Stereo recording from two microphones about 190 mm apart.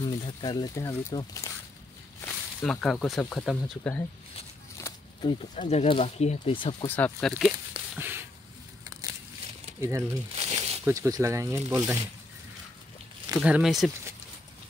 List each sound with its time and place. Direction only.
0.0 s speech: 25° left (ahead or behind)
2.2 s speech: 5° left (ahead or behind)
4.7 s a sound: 15° left (ahead or behind)
5.6 s speech: 35° left (ahead or behind)
6.9 s speech: 5° left (ahead or behind)
8.0 s a sound: 10° right (ahead or behind)
9.8 s speech: 15° right (ahead or behind)
10.3 s a sound: 30° right (ahead or behind)
10.9 s speech: 15° right (ahead or behind)
13.4 s speech: centre (ahead or behind)